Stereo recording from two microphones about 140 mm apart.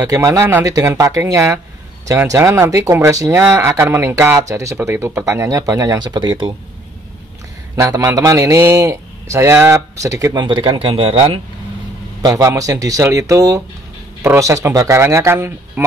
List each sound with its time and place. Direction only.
0.0 s speech: 20° right (ahead or behind)
7.7 s speech: 20° right (ahead or behind); by 11.4 s 45° right (ahead or behind)
12.2 s speech: 25° right (ahead or behind)